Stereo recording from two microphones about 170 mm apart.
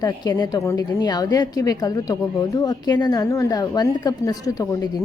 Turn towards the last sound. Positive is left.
turn(degrees=20)  # may be behind; listen again after turning